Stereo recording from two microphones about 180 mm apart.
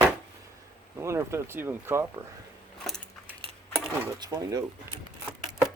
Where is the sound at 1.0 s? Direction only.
15° right (ahead or behind).